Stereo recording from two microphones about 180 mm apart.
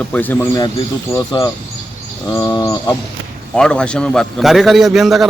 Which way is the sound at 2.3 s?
15° left (ahead or behind).